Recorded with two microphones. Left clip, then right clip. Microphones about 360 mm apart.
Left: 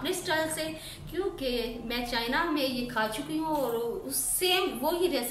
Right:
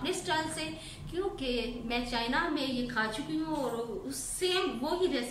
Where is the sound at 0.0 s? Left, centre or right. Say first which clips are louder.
Left 3 dB; centre.